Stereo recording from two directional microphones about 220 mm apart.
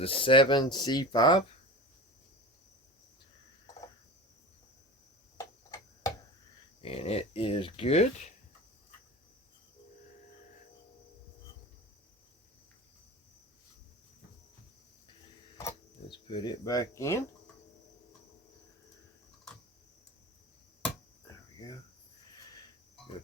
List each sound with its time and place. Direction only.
0.0 s speech: 25° left (ahead or behind)
5.4 s tick-tock: 15° left (ahead or behind)
6.8 s speech: 25° left (ahead or behind)
15.5 s speech: 15° left (ahead or behind)
21.2 s cricket: 15° left (ahead or behind)